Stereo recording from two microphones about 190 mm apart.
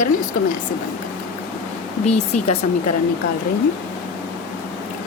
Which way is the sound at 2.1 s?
35° left (ahead or behind).